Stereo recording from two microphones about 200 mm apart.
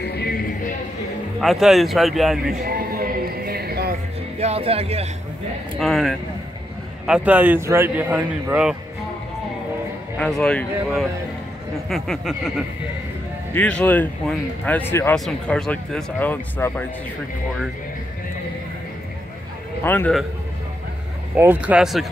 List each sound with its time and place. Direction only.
0.0 s a sound: 55° left (ahead or behind)
1.4 s a man's voice: centre (ahead or behind)
2.6 s music: 45° right (ahead or behind)
4.4 s speech: 30° right (ahead or behind)
5.8 s a man's voice: centre (ahead or behind)
10.1 s a man's voice: 5° left (ahead or behind)
11.9 s a man's voice: centre (ahead or behind)
19.8 s speech: 10° left (ahead or behind)
21.4 s a man's voice: 10° right (ahead or behind)